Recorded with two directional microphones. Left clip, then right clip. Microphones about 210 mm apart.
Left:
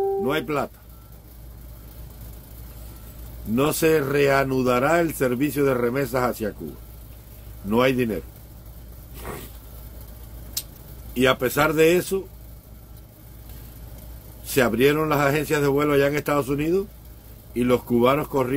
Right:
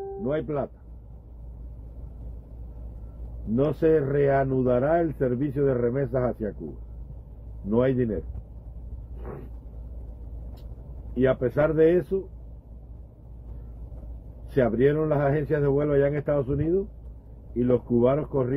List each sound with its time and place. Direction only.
0.2 s speech: 15° left (ahead or behind)
3.5 s speech: 20° left (ahead or behind)
7.7 s a man's voice: 15° left (ahead or behind)
11.1 s a man's voice: 15° left (ahead or behind)
14.5 s a man's voice: 15° left (ahead or behind)